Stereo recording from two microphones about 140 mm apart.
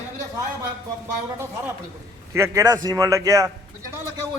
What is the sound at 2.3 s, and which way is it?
A man's voice, 20° right (ahead or behind).